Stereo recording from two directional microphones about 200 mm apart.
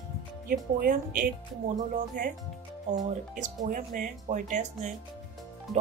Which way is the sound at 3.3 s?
40° right (ahead or behind).